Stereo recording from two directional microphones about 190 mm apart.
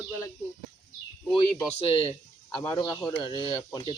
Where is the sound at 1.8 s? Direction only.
30° left (ahead or behind).